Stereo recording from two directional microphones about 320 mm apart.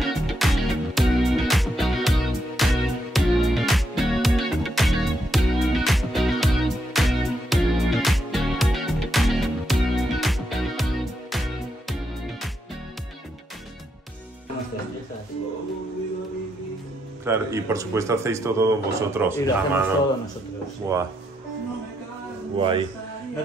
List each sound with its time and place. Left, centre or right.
0.0 s music: centre
17.2 s speech: centre
20.8 s speech: centre
22.6 s speech: centre